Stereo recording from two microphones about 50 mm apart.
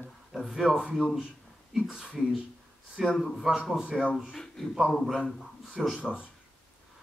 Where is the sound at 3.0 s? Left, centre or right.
Centre.